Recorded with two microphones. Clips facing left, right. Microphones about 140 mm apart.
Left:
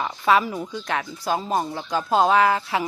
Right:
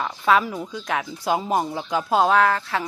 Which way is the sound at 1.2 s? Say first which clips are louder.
Right 2 dB; 15° right (ahead or behind).